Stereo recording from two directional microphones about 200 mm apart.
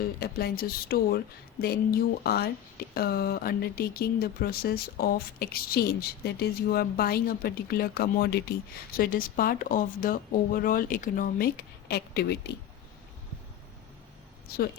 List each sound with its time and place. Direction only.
0.0 s speech: 50° left (ahead or behind)
14.5 s speech: 50° left (ahead or behind)